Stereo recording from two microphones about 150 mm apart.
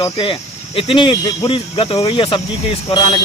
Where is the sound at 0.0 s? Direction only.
35° left (ahead or behind).